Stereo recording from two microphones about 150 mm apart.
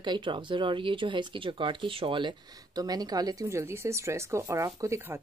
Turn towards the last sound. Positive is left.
turn(degrees=-15)  # may be behind; listen again after turning